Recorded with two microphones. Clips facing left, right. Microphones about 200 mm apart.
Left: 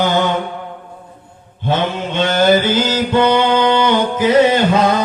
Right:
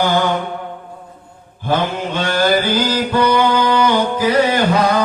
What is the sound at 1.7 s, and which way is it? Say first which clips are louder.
Mantra: even; 20° left (ahead or behind).